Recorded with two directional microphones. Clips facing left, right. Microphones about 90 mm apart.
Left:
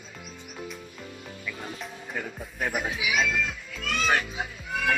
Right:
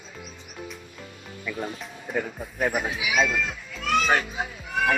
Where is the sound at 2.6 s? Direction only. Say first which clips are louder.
Right 3 dB; 35° right (ahead or behind).